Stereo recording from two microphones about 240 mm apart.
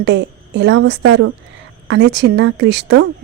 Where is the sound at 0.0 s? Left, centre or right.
Right.